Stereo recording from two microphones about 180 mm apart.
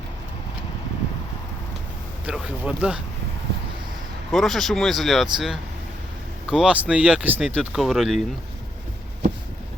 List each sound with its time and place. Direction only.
2.2 s speech: 5° right (ahead or behind)
4.3 s speech: centre (ahead or behind)